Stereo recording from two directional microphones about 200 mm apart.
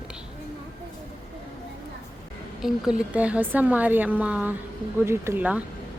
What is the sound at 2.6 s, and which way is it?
A woman's voice, centre (ahead or behind).